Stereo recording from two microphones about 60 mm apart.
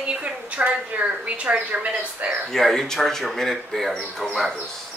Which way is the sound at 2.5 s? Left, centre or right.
Centre.